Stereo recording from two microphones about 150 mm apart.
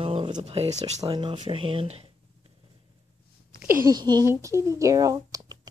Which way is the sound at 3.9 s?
25° right (ahead or behind).